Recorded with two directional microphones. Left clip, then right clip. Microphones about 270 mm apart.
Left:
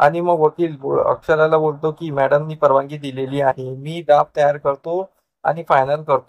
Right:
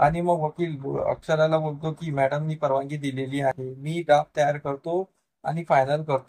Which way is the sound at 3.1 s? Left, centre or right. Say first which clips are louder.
Left 8 dB; left.